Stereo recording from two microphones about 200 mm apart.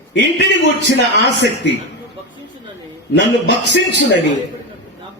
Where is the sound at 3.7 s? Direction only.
60° left (ahead or behind).